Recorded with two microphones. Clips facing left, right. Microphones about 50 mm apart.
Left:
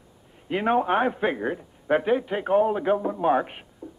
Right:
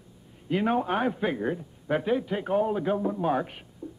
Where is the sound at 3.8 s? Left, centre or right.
Centre.